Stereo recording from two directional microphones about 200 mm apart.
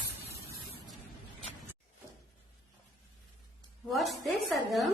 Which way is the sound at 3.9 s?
Centre (ahead or behind).